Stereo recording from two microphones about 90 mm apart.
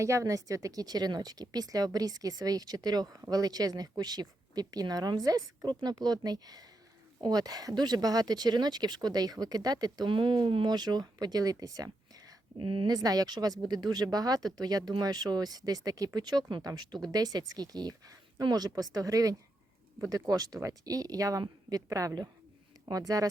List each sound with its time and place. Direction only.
0.0 s speech: 35° right (ahead or behind)
10.1 s speech: 65° right (ahead or behind); by 12.3 s 45° right (ahead or behind)
12.5 s speech: 75° right (ahead or behind)
12.9 s speech: 45° right (ahead or behind)